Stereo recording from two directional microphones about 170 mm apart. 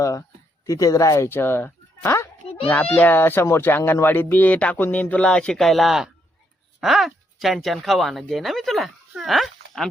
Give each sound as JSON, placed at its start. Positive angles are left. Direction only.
{"t": 0.0, "sound": "speech", "side_deg": 20}